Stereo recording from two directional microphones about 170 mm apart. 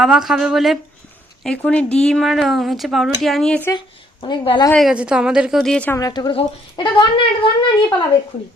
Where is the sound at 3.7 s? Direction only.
25° left (ahead or behind).